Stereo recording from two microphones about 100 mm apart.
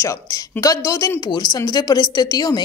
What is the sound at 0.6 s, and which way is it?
Speech, 35° left (ahead or behind).